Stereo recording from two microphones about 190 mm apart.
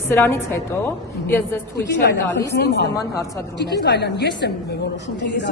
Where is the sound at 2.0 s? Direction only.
60° left (ahead or behind).